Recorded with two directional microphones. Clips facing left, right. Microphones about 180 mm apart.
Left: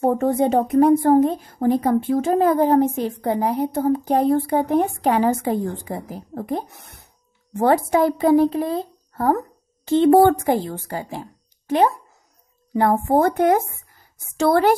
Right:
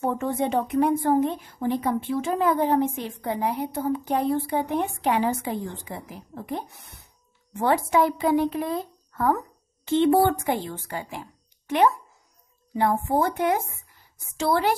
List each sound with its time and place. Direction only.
0.0 s speech: 40° left (ahead or behind)
12.7 s a woman's voice: 45° left (ahead or behind)